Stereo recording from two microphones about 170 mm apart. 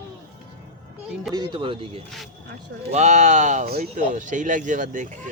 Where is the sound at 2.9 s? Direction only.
45° right (ahead or behind).